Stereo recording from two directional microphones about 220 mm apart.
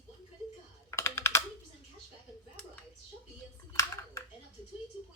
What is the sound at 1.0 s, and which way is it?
Computer keyboard, 10° left (ahead or behind).